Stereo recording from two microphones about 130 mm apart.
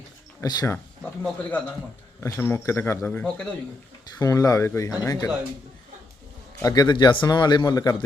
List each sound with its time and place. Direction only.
0.4 s speech: 30° left (ahead or behind)
1.2 s speech: 10° left (ahead or behind)
4.2 s speech: 25° left (ahead or behind)
6.6 s speech: 30° left (ahead or behind)